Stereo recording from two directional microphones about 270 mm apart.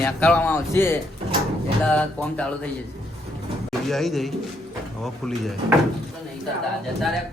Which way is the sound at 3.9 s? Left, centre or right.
Centre.